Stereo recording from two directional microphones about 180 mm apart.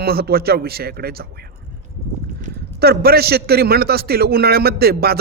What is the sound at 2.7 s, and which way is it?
Speech, 60° right (ahead or behind).